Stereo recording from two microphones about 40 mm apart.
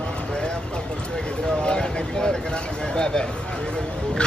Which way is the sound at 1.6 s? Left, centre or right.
Left.